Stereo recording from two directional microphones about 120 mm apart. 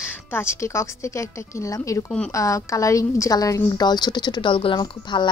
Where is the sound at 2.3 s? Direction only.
25° left (ahead or behind).